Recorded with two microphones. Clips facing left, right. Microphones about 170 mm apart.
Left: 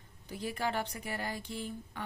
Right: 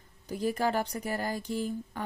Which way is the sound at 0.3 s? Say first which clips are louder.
Right 6 dB; 40° right (ahead or behind).